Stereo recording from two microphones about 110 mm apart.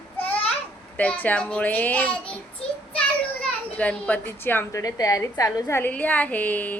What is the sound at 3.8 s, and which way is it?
Speech, 15° left (ahead or behind).